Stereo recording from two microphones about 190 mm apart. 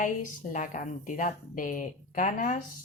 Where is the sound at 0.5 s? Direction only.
40° left (ahead or behind).